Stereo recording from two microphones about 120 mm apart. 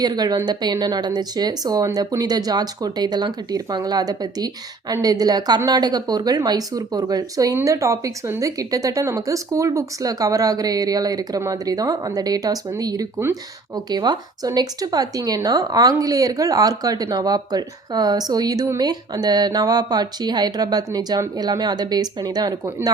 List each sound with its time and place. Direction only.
0.0 s speech: 35° right (ahead or behind)